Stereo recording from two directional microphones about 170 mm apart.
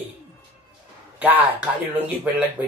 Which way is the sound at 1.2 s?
10° right (ahead or behind).